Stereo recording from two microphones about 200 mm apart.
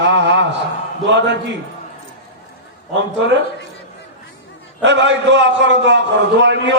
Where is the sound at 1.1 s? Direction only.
60° right (ahead or behind).